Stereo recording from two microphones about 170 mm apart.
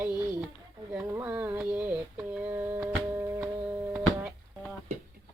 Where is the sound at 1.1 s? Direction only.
10° right (ahead or behind).